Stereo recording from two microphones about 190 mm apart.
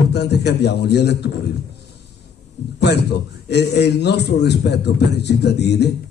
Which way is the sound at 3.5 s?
65° left (ahead or behind).